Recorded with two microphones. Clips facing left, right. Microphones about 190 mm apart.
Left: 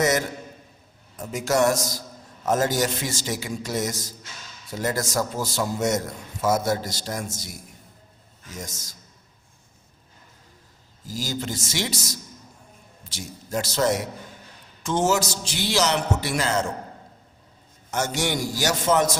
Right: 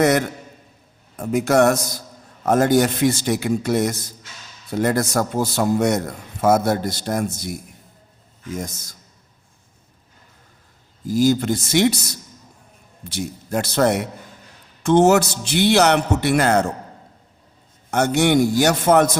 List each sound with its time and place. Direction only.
0.0 s a man's voice: 60° right (ahead or behind)
11.0 s a man's voice: 60° right (ahead or behind)
17.9 s a man's voice: 60° right (ahead or behind)